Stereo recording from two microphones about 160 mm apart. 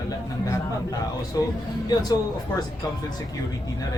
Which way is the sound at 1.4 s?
25° left (ahead or behind).